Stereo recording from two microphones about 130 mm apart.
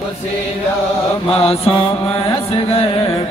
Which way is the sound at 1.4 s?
45° left (ahead or behind).